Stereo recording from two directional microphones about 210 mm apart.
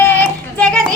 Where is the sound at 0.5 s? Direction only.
5° left (ahead or behind).